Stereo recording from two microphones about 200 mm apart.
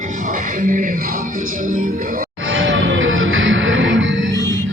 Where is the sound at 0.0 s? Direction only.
40° right (ahead or behind).